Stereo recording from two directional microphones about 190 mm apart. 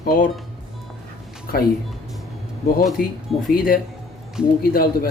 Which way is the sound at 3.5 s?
50° left (ahead or behind).